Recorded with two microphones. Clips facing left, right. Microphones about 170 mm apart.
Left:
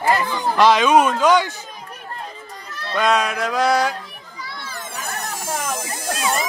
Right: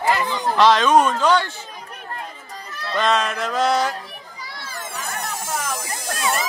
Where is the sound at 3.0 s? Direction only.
10° left (ahead or behind).